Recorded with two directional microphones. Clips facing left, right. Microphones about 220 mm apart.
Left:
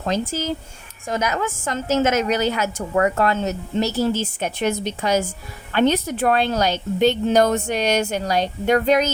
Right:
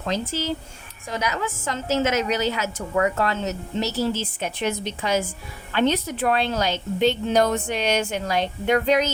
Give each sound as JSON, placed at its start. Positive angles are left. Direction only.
{"t": 0.0, "sound": "a woman's voice", "side_deg": 50}